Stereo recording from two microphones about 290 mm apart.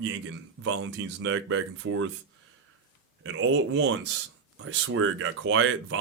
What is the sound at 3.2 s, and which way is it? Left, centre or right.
Speech, right.